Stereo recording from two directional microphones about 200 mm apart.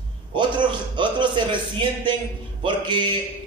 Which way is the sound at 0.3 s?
25° right (ahead or behind).